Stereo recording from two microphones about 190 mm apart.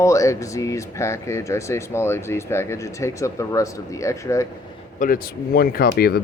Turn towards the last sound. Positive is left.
turn(degrees=55)  # may be behind; listen again after turning